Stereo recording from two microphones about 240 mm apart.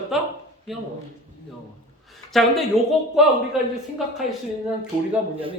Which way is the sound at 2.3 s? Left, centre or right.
Centre.